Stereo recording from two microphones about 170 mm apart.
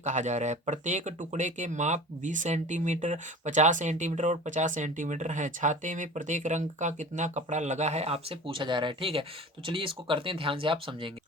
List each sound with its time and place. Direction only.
0.0 s speech: 45° right (ahead or behind)